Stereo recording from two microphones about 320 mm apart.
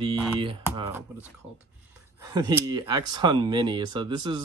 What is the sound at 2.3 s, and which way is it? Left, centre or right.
Speech, centre.